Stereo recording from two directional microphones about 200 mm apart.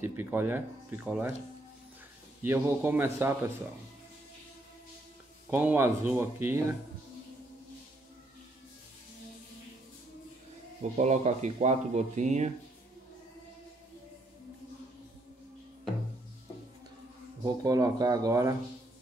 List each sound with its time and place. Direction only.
0.0 s speech: 10° right (ahead or behind)
2.4 s speech: 10° right (ahead or behind)
5.5 s speech: 10° right (ahead or behind)
10.8 s speech: 35° right (ahead or behind)
17.6 s speech: 15° right (ahead or behind)